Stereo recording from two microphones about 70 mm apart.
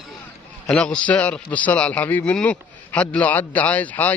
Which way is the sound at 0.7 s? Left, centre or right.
Centre.